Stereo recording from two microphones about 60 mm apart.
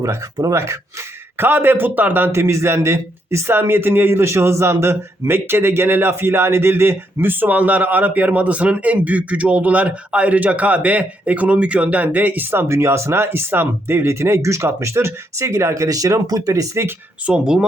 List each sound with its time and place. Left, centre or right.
0.0 s speech: right
17.2 s speech: centre